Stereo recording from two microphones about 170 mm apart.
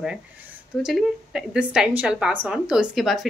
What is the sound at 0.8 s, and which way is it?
Speech, 5° right (ahead or behind).